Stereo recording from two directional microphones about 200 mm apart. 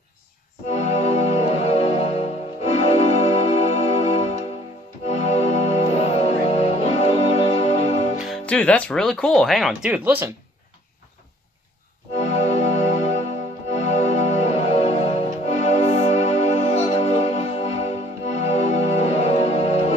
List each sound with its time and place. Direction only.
0.7 s music: 35° left (ahead or behind)
8.2 s speech: 5° left (ahead or behind)
12.2 s music: 35° left (ahead or behind)